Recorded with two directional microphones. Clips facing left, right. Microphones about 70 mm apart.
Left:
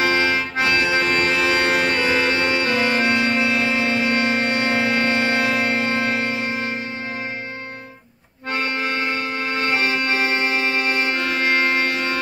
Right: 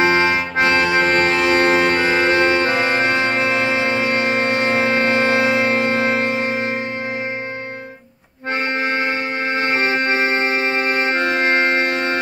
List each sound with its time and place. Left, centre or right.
0.0 s music: right
8.7 s music: right